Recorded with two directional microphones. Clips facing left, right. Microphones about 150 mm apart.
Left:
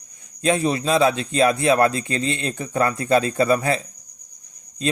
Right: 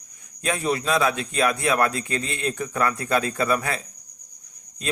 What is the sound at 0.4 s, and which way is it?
A man's voice, 30° left (ahead or behind).